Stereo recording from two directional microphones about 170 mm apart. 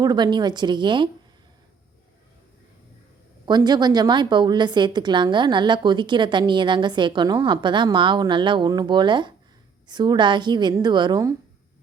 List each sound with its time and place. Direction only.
0.0 s a woman's voice: 25° right (ahead or behind)
3.4 s a woman's voice: 25° right (ahead or behind)